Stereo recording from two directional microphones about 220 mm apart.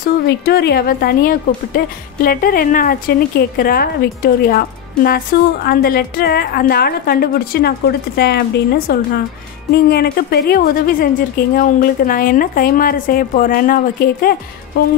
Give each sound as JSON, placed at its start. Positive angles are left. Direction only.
{"t": 0.5, "sound": "a woman's voice", "side_deg": 45}